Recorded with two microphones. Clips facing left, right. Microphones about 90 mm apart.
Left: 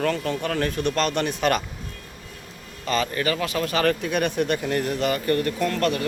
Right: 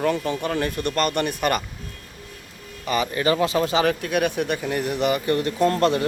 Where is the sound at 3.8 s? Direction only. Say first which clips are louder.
Right 1 dB; 5° right (ahead or behind); by 6.0 s 25° right (ahead or behind).